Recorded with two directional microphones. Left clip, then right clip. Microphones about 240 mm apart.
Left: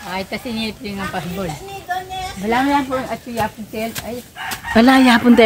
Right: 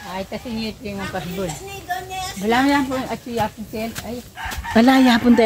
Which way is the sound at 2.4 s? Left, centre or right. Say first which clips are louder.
Even; right.